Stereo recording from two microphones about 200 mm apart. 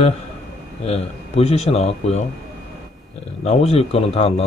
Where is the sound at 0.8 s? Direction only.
30° left (ahead or behind).